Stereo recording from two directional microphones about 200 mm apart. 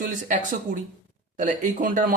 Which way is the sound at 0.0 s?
40° right (ahead or behind).